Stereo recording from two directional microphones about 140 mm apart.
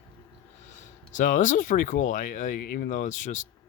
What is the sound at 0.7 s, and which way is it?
Speech, 65° left (ahead or behind).